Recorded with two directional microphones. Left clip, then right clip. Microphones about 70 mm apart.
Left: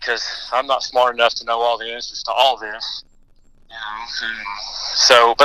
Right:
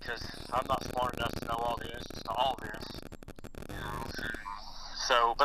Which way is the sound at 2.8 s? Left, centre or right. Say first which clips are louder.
Left 16 dB; left.